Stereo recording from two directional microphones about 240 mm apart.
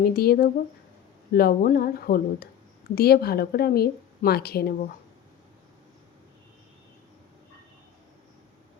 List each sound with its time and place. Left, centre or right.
0.0 s a woman's voice: left